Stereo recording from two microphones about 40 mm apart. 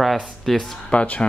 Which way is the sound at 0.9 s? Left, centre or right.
Left.